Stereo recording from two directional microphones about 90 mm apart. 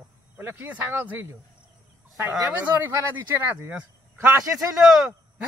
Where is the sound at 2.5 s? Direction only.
25° right (ahead or behind).